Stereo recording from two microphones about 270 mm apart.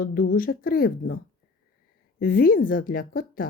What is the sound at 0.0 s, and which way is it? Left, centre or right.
Speech, left.